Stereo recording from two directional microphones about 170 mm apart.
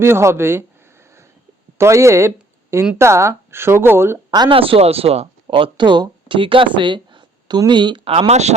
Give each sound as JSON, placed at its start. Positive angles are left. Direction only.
{"t": 0.0, "sound": "speech", "side_deg": -15}
{"t": 1.8, "sound": "speech", "side_deg": -15}
{"t": 4.3, "sound": "speech", "side_deg": -30}